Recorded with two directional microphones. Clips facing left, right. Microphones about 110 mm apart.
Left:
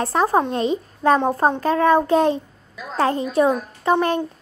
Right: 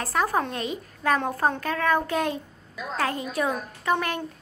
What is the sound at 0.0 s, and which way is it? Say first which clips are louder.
A child's voice: left 6 dB; 30° left (ahead or behind).